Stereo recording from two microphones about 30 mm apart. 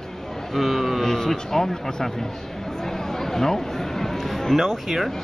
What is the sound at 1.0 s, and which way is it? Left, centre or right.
Speech, centre.